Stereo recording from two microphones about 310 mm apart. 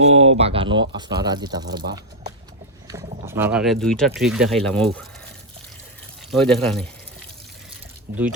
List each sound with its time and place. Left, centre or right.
0.0 s speech: centre
3.2 s speech: centre
6.3 s speech: centre
8.1 s speech: centre